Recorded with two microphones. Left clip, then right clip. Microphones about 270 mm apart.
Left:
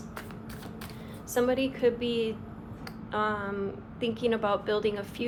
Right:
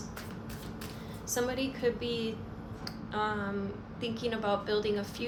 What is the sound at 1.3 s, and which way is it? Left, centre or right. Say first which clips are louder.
A woman's voice: left 6 dB; left.